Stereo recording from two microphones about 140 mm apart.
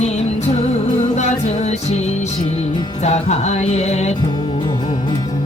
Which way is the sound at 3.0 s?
55° left (ahead or behind).